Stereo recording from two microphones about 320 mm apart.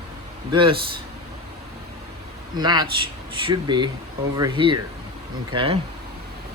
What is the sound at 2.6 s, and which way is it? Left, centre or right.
Speech, centre.